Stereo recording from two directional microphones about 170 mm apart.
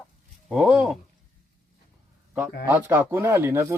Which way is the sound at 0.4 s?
5° right (ahead or behind).